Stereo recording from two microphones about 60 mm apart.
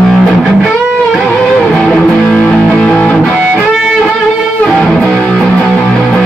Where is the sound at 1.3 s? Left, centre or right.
Centre.